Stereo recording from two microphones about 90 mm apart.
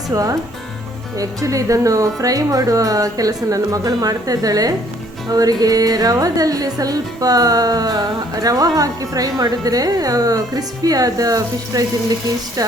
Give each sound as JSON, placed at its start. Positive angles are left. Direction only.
{"t": 0.1, "sound": "speech", "side_deg": -40}
{"t": 5.3, "sound": "music", "side_deg": -45}